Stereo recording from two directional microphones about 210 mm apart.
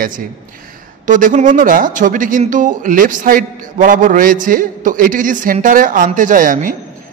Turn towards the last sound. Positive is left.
turn(degrees=-40)  # may be behind; listen again after turning